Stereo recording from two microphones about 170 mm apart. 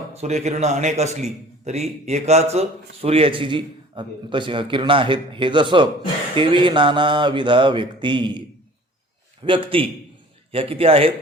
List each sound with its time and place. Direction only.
0.1 s a man's voice: 40° right (ahead or behind)
6.3 s mantra: 30° right (ahead or behind)
9.4 s a man's voice: 30° right (ahead or behind)